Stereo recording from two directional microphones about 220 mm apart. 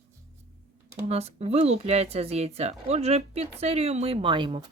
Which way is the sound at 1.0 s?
30° right (ahead or behind).